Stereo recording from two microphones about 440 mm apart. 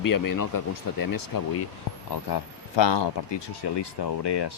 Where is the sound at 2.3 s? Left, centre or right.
Left.